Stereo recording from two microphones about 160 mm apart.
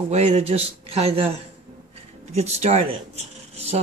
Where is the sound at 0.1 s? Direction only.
40° right (ahead or behind).